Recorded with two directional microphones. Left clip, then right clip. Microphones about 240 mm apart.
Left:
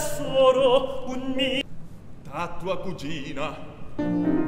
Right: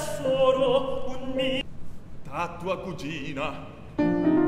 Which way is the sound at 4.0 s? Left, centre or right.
Right.